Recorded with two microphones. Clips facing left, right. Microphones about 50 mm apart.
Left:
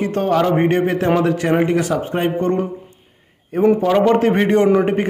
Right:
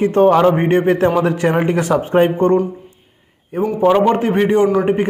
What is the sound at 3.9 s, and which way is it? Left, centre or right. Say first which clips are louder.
Speech: right 1 dB; centre.